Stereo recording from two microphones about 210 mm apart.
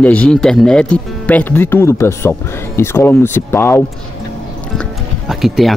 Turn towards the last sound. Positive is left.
turn(degrees=0)  # may be behind; listen again after turning